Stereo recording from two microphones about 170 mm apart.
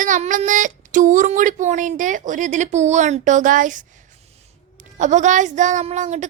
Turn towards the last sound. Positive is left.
turn(degrees=-45)  # may be behind; listen again after turning